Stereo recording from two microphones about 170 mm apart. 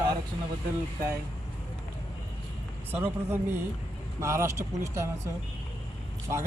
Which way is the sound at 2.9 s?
15° right (ahead or behind).